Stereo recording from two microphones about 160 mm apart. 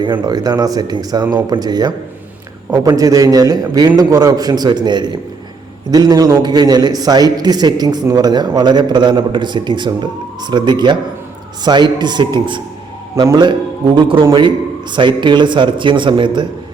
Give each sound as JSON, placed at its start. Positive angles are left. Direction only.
{"t": 0.0, "sound": "a man's voice", "side_deg": -25}